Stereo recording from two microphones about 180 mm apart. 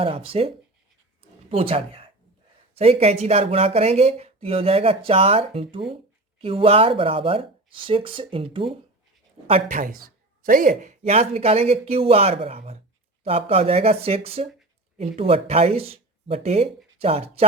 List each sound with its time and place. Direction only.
0.0 s speech: 30° right (ahead or behind)
9.7 s speech: 50° right (ahead or behind); by 17.4 s 35° right (ahead or behind)